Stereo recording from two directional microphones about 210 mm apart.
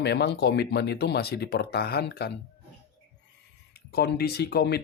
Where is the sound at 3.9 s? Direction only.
50° left (ahead or behind).